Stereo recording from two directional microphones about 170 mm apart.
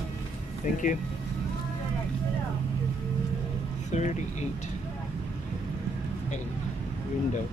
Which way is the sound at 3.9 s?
45° left (ahead or behind).